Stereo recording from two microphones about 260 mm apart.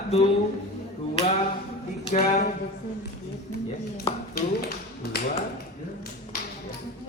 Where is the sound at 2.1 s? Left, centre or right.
Left.